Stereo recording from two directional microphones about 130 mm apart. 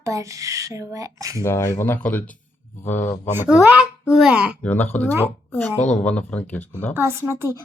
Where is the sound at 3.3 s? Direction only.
15° right (ahead or behind).